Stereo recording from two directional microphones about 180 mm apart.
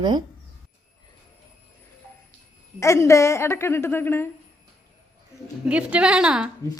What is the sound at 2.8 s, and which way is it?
A woman's voice, 15° left (ahead or behind).